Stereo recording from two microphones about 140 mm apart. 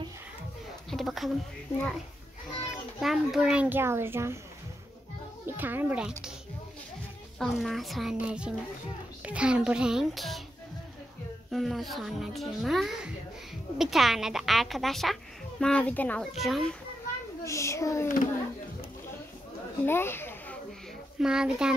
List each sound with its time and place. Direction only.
0.8 s a sound: centre (ahead or behind)
3.0 s a child's voice: centre (ahead or behind); by 4.4 s 20° right (ahead or behind)
5.6 s a child's voice: 15° right (ahead or behind)
7.3 s a child's voice: centre (ahead or behind)
11.5 s a child's voice: centre (ahead or behind)
16.3 s a child's voice: centre (ahead or behind)
17.5 s a child's voice: 20° left (ahead or behind)
18.0 s a child's voice: 75° left (ahead or behind)
19.9 s a sound: 15° left (ahead or behind)
21.2 s a child's voice: 5° right (ahead or behind)